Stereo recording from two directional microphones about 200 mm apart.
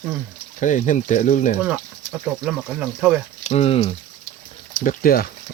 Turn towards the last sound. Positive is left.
turn(degrees=45)  # may be behind; listen again after turning